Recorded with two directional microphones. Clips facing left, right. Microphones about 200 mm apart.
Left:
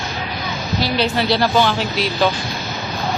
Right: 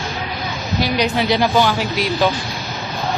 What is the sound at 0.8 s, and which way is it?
Speech, 15° right (ahead or behind).